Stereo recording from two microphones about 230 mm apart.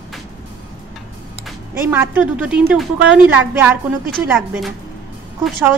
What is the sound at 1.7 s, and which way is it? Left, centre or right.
A woman's voice, centre.